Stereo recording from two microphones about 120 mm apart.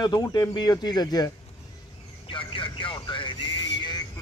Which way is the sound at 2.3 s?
45° left (ahead or behind).